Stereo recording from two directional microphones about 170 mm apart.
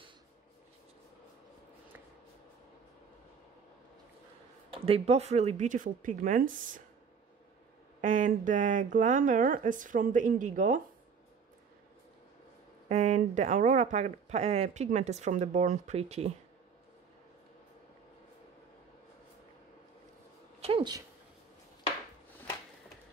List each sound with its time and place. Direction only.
4.8 s speech: 35° right (ahead or behind); by 6.8 s 50° right (ahead or behind)
8.0 s speech: 50° right (ahead or behind)
12.8 s speech: 40° right (ahead or behind)
20.6 s a sound: 30° right (ahead or behind)